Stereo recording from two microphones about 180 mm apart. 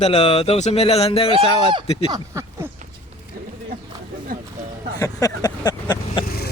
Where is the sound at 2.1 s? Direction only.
15° right (ahead or behind).